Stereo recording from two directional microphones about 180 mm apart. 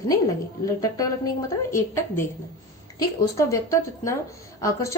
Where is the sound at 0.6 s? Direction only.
20° left (ahead or behind).